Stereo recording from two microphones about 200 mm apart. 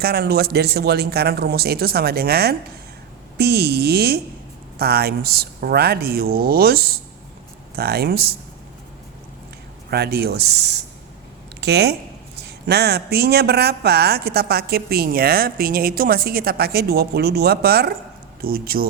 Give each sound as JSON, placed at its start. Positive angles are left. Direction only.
{"t": 0.0, "sound": "speech", "side_deg": -50}
{"t": 9.9, "sound": "speech", "side_deg": -50}